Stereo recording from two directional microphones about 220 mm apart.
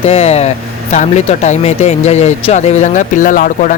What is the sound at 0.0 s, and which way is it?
Speech, 30° left (ahead or behind).